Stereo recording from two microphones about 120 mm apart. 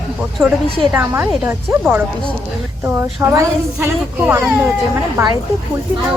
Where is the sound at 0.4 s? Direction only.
15° right (ahead or behind).